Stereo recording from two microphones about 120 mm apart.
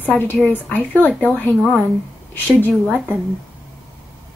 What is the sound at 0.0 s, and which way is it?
Speech, 15° left (ahead or behind).